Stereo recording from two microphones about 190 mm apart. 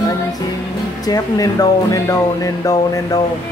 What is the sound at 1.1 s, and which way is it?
Speech, 20° left (ahead or behind).